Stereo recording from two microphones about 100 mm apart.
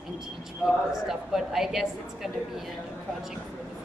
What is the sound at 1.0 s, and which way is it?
A woman's voice, 5° right (ahead or behind).